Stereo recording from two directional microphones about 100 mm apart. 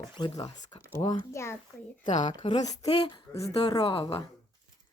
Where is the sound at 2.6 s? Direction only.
40° left (ahead or behind).